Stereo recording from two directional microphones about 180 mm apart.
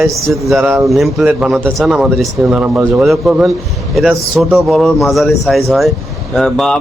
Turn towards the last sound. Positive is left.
turn(degrees=5)  # may be behind; listen again after turning